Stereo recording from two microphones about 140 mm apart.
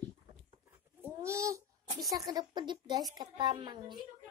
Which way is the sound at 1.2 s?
20° right (ahead or behind).